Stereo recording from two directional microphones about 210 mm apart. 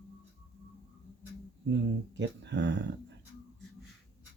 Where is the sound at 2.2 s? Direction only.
55° right (ahead or behind).